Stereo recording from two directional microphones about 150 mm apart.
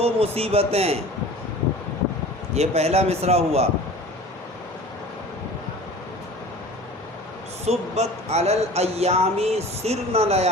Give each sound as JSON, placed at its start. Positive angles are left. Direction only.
{"t": 0.0, "sound": "a man's voice", "side_deg": -40}
{"t": 2.6, "sound": "speech", "side_deg": -45}
{"t": 7.6, "sound": "speech", "side_deg": -45}